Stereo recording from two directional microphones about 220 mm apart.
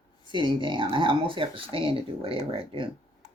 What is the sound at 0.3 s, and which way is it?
Speech, 20° right (ahead or behind).